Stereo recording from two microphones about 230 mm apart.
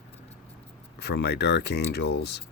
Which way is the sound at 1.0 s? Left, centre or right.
Left.